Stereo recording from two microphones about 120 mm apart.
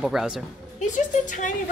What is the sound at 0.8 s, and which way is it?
Speech, 90° left.